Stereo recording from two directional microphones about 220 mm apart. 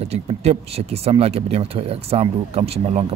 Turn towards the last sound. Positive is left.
turn(degrees=-25)  # may be behind; listen again after turning